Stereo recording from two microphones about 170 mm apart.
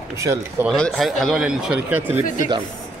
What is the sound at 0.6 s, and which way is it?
Speech, 5° left (ahead or behind).